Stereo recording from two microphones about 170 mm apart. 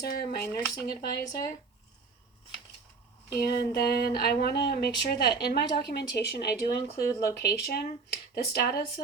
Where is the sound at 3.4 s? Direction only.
75° left (ahead or behind).